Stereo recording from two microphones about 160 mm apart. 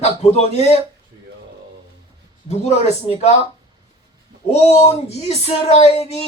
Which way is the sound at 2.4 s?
45° left (ahead or behind).